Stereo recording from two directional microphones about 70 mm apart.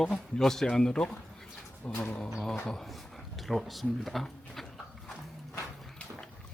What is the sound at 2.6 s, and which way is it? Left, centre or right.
Speech, centre.